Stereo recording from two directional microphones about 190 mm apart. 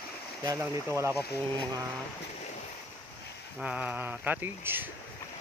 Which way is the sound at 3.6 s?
5° right (ahead or behind).